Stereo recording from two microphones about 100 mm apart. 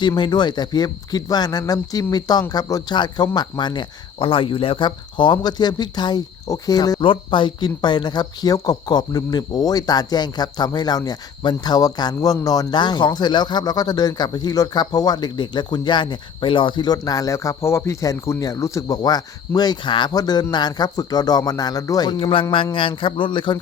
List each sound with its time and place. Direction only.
0.2 s speech: 45° left (ahead or behind)
6.5 s a sound: 40° left (ahead or behind)
7.0 s speech: 55° left (ahead or behind)
20.1 s speech: 45° left (ahead or behind)
20.5 s a sound: 45° left (ahead or behind)
22.2 s speech: 60° left (ahead or behind)